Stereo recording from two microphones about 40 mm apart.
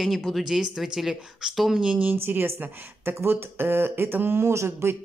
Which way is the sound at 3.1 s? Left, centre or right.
Right.